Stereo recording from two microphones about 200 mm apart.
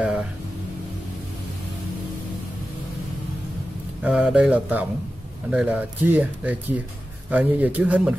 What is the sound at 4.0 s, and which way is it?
A man's voice, 5° right (ahead or behind).